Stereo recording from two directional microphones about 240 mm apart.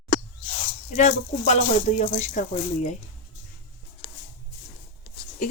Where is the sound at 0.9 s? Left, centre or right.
Left.